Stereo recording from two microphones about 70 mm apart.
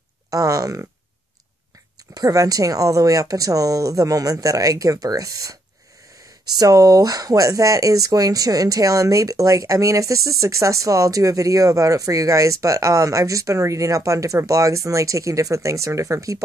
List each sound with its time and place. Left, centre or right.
0.3 s a woman's voice: right
2.1 s a woman's voice: right
6.6 s speech: right